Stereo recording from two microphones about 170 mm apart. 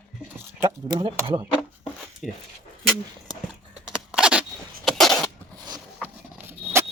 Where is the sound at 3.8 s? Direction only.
5° right (ahead or behind).